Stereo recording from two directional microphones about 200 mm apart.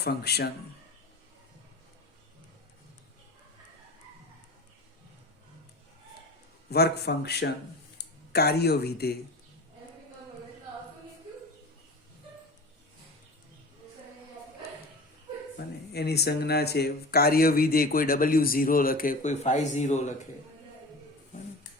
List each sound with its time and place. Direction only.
0.0 s speech: 55° left (ahead or behind)
6.7 s speech: 55° left (ahead or behind)
15.5 s speech: 55° left (ahead or behind); by 20.2 s 35° left (ahead or behind)